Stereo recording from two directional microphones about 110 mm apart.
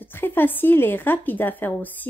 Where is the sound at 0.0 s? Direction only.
20° left (ahead or behind).